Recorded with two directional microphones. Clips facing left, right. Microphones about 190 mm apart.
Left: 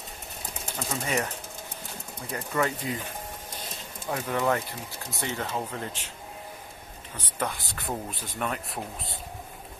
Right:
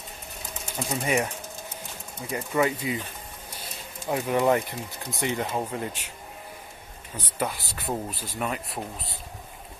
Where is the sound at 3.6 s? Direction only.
15° right (ahead or behind).